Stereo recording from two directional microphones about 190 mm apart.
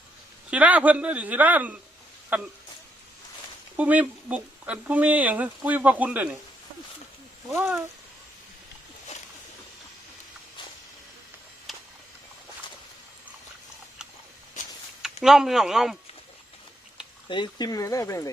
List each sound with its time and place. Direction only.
0.5 s speech: 5° right (ahead or behind)
3.8 s speech: 10° right (ahead or behind)
7.5 s speech: 5° right (ahead or behind)
11.7 s a sound: centre (ahead or behind)
15.0 s speech: 5° right (ahead or behind)
17.2 s speech: 25° left (ahead or behind)